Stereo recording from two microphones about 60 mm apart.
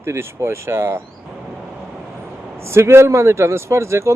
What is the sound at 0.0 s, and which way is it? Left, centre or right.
Speech, right.